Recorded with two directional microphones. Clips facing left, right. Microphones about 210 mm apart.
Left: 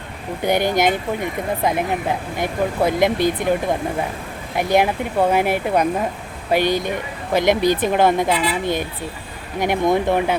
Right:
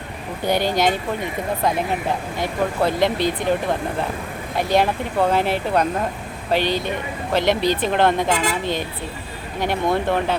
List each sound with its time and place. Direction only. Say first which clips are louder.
0.4 s speech: left 2 dB; 15° left (ahead or behind)
8.3 s speech: left 1 dB; 45° right (ahead or behind)
8.6 s speech: left 2 dB; 10° left (ahead or behind)